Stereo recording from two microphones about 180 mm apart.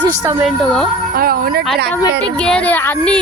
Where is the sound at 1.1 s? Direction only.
55° right (ahead or behind).